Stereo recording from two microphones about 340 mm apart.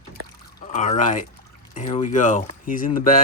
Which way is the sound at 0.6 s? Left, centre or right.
Left.